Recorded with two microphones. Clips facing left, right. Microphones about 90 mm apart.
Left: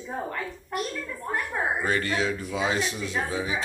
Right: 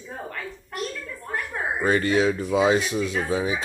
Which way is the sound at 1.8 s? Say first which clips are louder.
Right 10 dB; 25° right (ahead or behind).